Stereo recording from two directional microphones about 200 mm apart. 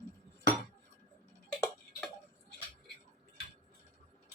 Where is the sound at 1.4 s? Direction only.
5° left (ahead or behind).